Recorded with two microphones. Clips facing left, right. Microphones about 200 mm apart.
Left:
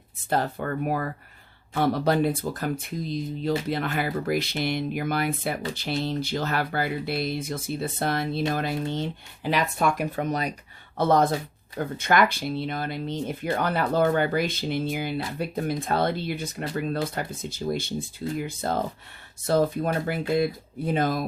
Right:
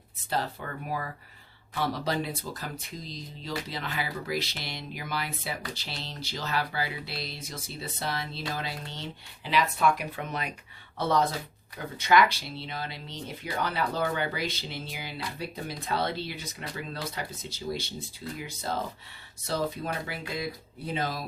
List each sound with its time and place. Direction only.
0.3 s speech: 55° left (ahead or behind)
10.9 s speech: 50° left (ahead or behind)